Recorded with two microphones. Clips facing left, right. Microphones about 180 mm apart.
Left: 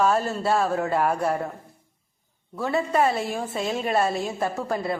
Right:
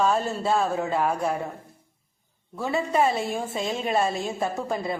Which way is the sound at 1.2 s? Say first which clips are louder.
Left 2 dB; 10° right (ahead or behind).